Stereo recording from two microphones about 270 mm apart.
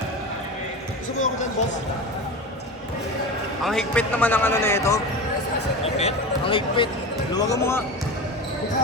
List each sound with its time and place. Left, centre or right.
3.6 s a man's voice: centre
5.8 s a man's voice: left